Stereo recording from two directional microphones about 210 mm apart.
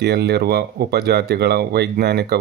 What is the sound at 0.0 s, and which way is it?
Speech, 50° right (ahead or behind).